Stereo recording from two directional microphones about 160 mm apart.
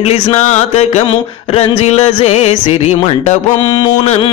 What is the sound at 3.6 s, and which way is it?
Music, 30° left (ahead or behind).